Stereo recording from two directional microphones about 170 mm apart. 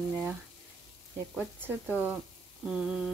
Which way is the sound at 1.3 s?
10° right (ahead or behind).